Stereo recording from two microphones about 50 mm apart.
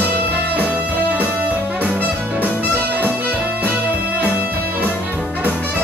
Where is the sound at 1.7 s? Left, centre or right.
Right.